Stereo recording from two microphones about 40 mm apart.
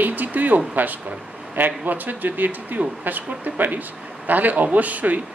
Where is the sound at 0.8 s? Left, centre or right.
Right.